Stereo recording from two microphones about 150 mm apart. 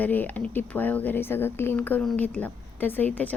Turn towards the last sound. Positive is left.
turn(degrees=10)  # may be behind; listen again after turning